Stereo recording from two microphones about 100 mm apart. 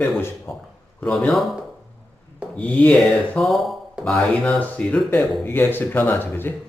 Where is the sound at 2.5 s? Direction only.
15° left (ahead or behind).